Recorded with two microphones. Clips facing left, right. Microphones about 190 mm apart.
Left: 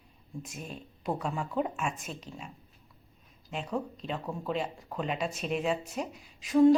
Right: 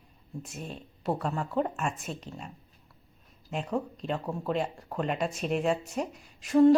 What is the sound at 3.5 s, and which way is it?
Speech, 5° right (ahead or behind).